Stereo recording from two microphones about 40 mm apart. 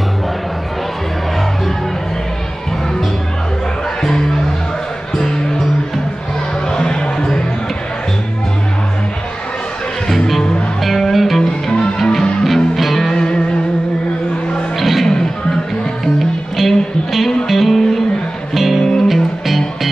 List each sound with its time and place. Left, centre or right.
4.0 s music: centre
6.7 s music: left
10.0 s music: centre
13.0 s music: centre
14.8 s music: centre
16.5 s music: centre
18.8 s music: centre
19.4 s music: centre